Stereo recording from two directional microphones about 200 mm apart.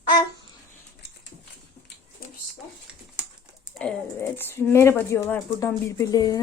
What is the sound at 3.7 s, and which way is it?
A woman's voice, 5° left (ahead or behind).